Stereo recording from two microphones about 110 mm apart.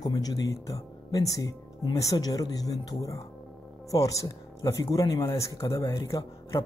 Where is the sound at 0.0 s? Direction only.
35° left (ahead or behind).